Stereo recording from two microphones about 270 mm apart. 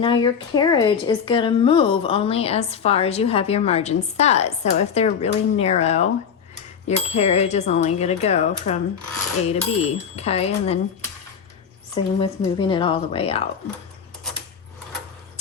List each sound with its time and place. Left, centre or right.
0.0 s a woman's voice: centre
11.9 s a woman's voice: centre